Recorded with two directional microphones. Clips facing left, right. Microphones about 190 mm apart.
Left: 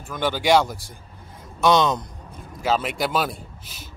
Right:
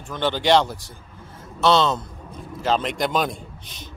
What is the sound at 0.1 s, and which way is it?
A man's voice, 10° left (ahead or behind).